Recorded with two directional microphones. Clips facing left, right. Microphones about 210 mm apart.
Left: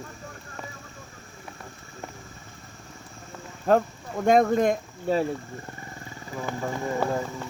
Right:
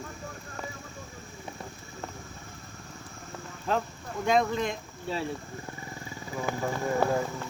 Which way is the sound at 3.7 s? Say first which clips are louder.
Left 8 dB; 50° left (ahead or behind).